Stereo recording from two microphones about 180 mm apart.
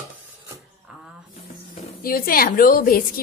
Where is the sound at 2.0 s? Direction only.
55° left (ahead or behind).